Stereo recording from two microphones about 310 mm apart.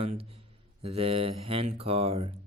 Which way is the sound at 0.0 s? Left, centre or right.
Centre.